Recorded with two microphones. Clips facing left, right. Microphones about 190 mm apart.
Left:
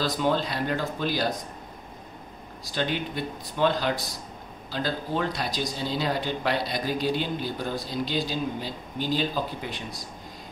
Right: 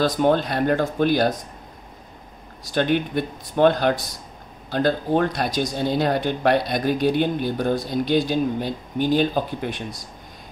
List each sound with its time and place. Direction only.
0.0 s speech: 55° right (ahead or behind)
2.7 s speech: 55° right (ahead or behind)